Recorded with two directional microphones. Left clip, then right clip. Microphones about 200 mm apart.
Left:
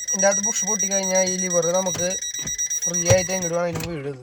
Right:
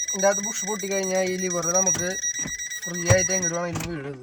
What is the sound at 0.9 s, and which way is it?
Speech, 35° left (ahead or behind).